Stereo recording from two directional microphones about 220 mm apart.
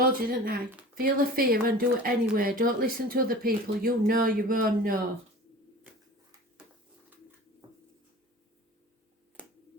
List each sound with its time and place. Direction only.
0.0 s speech: 40° right (ahead or behind)